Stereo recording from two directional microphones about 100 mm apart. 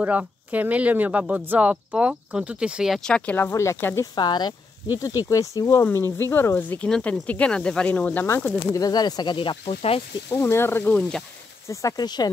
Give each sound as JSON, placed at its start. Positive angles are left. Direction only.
{"t": 0.0, "sound": "speech", "side_deg": -15}
{"t": 3.0, "sound": "speech", "side_deg": 10}
{"t": 4.1, "sound": "speech", "side_deg": 45}
{"t": 5.3, "sound": "speech", "side_deg": 35}
{"t": 8.7, "sound": "speech", "side_deg": 40}
{"t": 10.3, "sound": "speech", "side_deg": 25}
{"t": 10.9, "sound": "speech", "side_deg": 10}
{"t": 11.7, "sound": "speech", "side_deg": 30}